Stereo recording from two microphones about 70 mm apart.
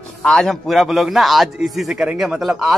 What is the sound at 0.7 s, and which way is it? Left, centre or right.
A man's voice, centre.